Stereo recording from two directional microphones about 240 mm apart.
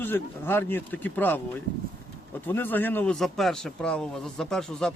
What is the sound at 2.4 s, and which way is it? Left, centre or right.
A man's voice, centre.